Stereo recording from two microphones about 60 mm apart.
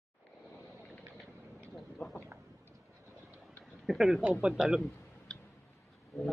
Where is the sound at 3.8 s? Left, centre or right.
Centre.